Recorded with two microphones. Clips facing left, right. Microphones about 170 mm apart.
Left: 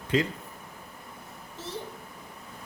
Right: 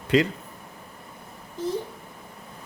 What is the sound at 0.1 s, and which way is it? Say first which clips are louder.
Speech: right 5 dB; 80° right.